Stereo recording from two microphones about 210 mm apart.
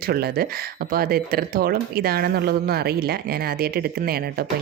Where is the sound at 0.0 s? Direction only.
45° right (ahead or behind).